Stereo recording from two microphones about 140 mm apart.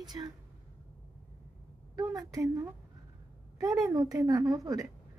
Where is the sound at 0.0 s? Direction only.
30° right (ahead or behind).